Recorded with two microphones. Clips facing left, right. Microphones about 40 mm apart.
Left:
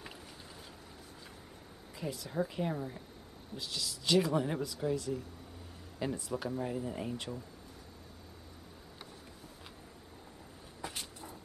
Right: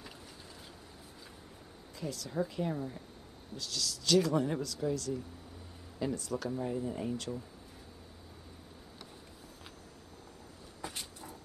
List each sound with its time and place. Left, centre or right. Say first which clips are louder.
2.0 s speech: even; centre
3.5 s speech: right 1 dB; left
10.8 s a sound: even; centre